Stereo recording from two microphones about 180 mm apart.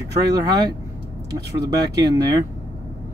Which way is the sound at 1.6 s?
20° right (ahead or behind).